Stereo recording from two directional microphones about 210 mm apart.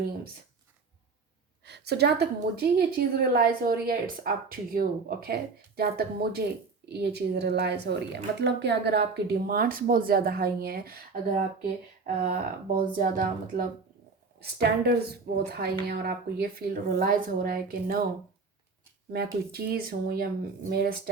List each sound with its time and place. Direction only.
1.6 s a woman's voice: 50° right (ahead or behind)
19.1 s a woman's voice: 50° right (ahead or behind)